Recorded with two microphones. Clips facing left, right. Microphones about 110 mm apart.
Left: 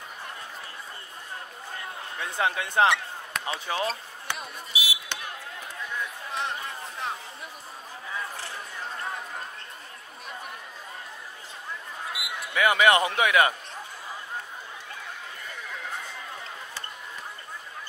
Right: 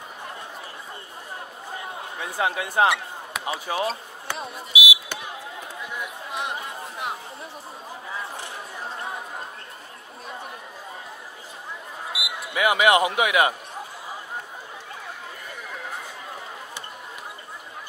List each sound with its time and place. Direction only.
2.4 s a man's voice: 20° right (ahead or behind)
2.7 s speech: 5° right (ahead or behind)
4.7 s basketball bounce: 15° right (ahead or behind)
5.8 s chatter: 15° right (ahead or behind)
12.1 s basketball bounce: 5° right (ahead or behind)
12.5 s a man's voice: 20° right (ahead or behind)